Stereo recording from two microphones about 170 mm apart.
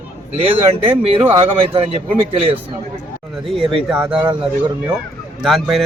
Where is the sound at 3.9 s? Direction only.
5° right (ahead or behind).